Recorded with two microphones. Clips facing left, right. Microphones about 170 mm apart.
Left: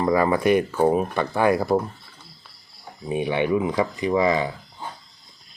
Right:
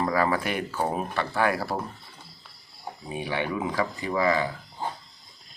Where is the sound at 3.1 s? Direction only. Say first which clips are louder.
Left 8 dB; 20° left (ahead or behind).